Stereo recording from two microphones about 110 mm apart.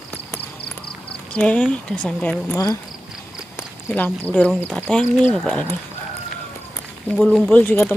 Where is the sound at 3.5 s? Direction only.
15° left (ahead or behind).